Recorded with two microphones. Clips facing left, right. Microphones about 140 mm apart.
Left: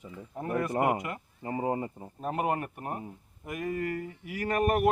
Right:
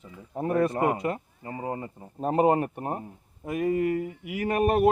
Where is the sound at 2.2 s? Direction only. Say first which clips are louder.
Right 8 dB; 30° right (ahead or behind).